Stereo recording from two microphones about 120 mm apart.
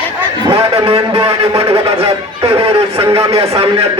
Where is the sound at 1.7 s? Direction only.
55° right (ahead or behind).